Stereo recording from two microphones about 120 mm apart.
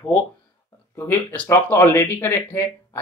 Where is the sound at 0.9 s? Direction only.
15° left (ahead or behind).